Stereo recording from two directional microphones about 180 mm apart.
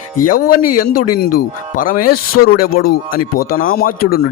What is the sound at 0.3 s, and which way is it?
Speech, 50° left (ahead or behind).